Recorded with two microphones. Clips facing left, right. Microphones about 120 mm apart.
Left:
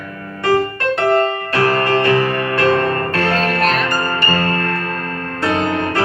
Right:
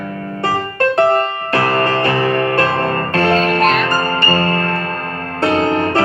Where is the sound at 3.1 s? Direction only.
35° right (ahead or behind).